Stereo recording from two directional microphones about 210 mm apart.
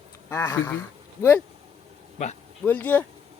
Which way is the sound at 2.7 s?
10° left (ahead or behind).